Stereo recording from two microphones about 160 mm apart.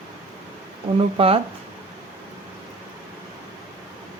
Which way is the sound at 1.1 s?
35° right (ahead or behind).